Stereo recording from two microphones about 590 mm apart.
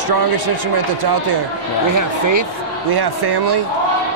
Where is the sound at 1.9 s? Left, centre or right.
Right.